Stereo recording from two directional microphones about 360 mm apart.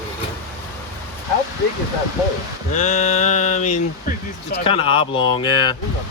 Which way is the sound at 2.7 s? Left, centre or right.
Centre.